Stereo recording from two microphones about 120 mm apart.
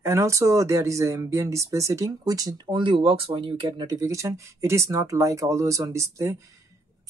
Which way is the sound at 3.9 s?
25° right (ahead or behind).